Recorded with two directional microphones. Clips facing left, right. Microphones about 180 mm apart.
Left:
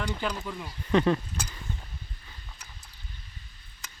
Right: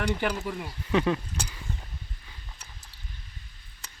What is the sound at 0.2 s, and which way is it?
Speech, 10° right (ahead or behind).